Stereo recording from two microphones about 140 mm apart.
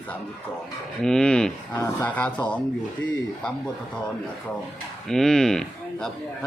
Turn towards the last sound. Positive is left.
turn(degrees=5)  # may be behind; listen again after turning